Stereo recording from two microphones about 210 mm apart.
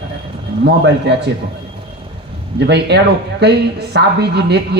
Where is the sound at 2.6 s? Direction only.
55° right (ahead or behind).